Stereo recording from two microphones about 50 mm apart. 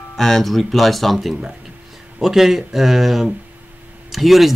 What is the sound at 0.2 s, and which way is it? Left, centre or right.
Speech, centre.